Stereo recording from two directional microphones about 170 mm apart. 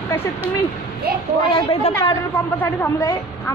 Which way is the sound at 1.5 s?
35° left (ahead or behind).